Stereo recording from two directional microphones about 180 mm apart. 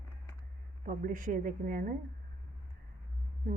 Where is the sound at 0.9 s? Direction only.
50° right (ahead or behind).